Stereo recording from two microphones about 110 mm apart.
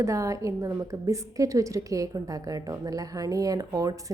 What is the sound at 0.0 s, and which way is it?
A woman's voice, 30° right (ahead or behind).